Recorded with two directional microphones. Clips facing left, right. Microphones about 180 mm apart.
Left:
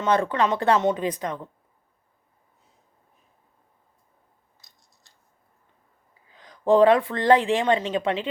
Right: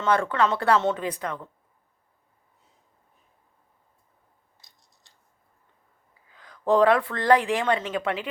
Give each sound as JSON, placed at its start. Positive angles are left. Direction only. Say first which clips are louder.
{"t": 0.0, "sound": "speech", "louder": "left 1 dB", "side_deg": 20}
{"t": 6.3, "sound": "speech", "louder": "left 3 dB", "side_deg": 20}